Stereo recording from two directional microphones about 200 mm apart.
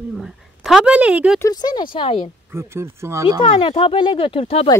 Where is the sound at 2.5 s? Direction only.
10° right (ahead or behind).